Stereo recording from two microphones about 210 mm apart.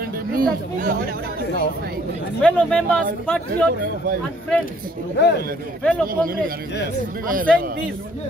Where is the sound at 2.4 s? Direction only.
5° left (ahead or behind).